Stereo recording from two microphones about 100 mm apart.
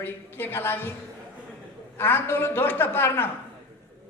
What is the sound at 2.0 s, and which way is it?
A man's voice, 20° left (ahead or behind).